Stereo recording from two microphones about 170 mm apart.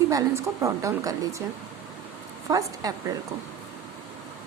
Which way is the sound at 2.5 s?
20° right (ahead or behind).